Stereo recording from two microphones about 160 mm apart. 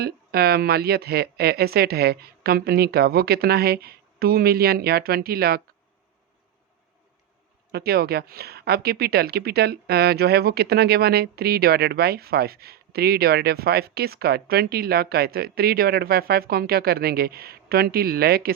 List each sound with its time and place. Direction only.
0.0 s a woman's voice: 80° right
7.7 s a woman's voice: 75° right (ahead or behind)